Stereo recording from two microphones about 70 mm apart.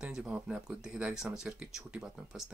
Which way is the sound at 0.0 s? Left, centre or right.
Centre.